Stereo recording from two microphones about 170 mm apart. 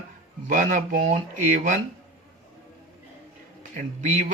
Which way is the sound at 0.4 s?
50° right (ahead or behind).